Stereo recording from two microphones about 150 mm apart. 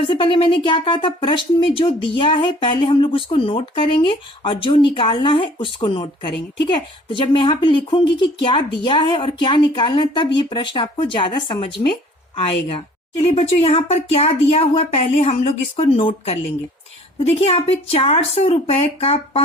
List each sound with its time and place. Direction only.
0.1 s speech: 35° left (ahead or behind)